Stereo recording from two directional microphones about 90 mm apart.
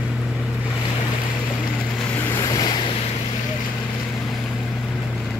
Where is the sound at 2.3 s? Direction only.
45° left (ahead or behind).